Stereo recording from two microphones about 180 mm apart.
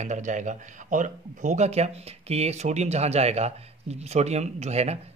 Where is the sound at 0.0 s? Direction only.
45° right (ahead or behind).